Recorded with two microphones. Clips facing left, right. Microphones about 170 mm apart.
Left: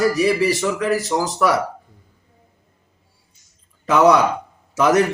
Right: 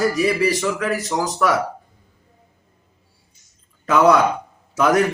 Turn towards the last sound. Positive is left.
turn(degrees=0)  # may be behind; listen again after turning